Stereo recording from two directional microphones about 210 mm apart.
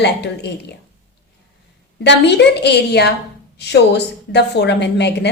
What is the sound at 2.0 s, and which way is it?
A woman's voice, 55° left (ahead or behind).